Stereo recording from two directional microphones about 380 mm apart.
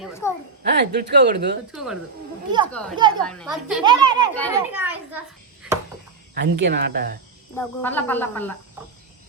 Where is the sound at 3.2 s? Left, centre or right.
Centre.